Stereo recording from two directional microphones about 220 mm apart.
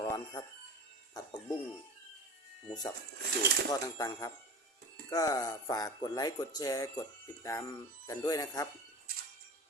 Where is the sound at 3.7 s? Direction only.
15° left (ahead or behind).